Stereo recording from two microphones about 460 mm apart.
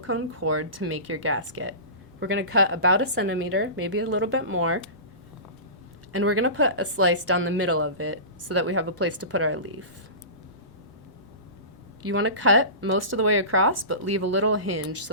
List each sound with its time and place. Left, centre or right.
0.0 s speech: right
6.1 s speech: right
12.0 s speech: right